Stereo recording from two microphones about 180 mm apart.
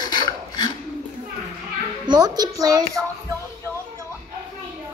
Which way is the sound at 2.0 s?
20° right (ahead or behind).